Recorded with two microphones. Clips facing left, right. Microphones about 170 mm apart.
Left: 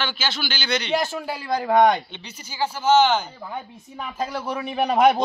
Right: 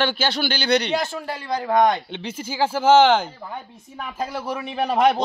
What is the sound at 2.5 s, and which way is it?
Speech, 90° right.